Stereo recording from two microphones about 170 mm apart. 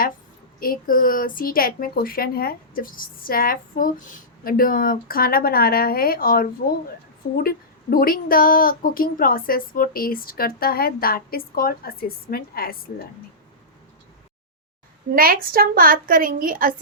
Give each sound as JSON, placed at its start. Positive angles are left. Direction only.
{"t": 0.6, "sound": "a woman's voice", "side_deg": 55}
{"t": 15.1, "sound": "a woman's voice", "side_deg": -60}